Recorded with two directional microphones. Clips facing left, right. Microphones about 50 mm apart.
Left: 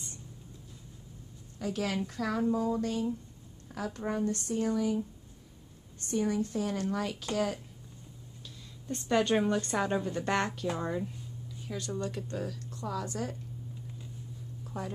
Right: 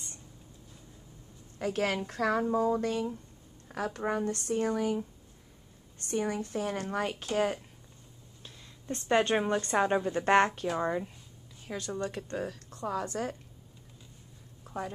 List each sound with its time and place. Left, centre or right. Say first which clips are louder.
1.6 s speech: right 2 dB; right
6.1 s speech: left 1 dB; right
8.9 s a woman's voice: right 1 dB; right
14.6 s a sound: right 2 dB; right